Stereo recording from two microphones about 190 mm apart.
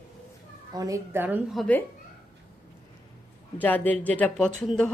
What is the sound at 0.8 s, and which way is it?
Speech, 15° right (ahead or behind).